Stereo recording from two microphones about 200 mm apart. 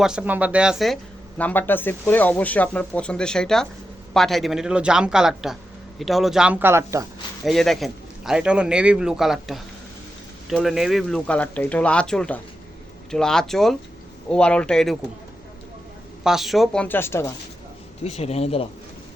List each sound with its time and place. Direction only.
0.0 s speech: 5° right (ahead or behind)
1.4 s speech: 10° left (ahead or behind); by 7.1 s 15° right (ahead or behind)
7.4 s speech: centre (ahead or behind)
16.2 s speech: centre (ahead or behind)
18.0 s a man's voice: 30° left (ahead or behind)